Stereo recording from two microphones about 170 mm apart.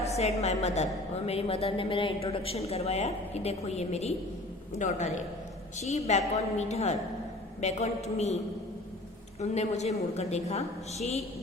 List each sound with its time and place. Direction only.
0.0 s a woman's voice: 40° left (ahead or behind)
9.4 s a woman's voice: 40° left (ahead or behind)